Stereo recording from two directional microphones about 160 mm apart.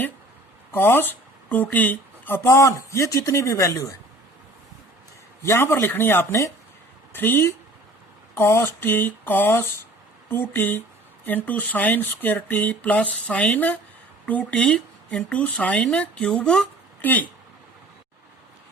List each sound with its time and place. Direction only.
0.7 s speech: 15° left (ahead or behind)
5.4 s speech: 15° left (ahead or behind)